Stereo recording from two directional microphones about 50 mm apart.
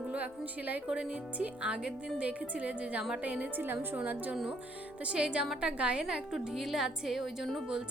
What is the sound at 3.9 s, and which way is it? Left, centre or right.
Speech, right.